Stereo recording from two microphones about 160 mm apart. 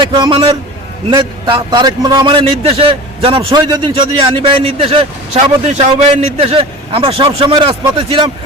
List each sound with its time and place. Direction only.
0.0 s a man's voice: 30° right (ahead or behind)